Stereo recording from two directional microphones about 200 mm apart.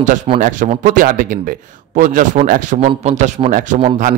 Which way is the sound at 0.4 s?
40° right (ahead or behind).